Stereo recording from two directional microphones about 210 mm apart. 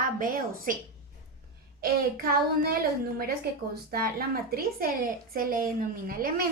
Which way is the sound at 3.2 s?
45° right (ahead or behind).